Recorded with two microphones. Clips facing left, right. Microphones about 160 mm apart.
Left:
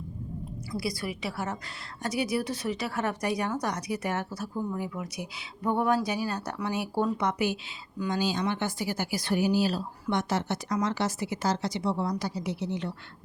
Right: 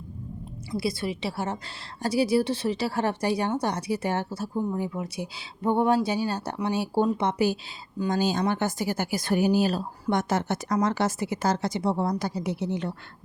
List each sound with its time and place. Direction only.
0.7 s a woman's voice: 25° right (ahead or behind)
8.2 s speech: 45° right (ahead or behind)